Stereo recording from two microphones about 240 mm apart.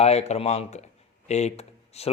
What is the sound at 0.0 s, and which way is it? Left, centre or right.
A man's voice, left.